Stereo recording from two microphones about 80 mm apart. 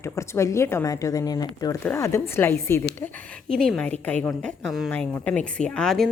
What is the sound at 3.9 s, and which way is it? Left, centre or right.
A woman's voice, centre.